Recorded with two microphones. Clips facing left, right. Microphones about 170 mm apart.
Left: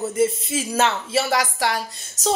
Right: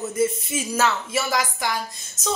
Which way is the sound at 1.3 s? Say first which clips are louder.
Left 3 dB; 70° left (ahead or behind).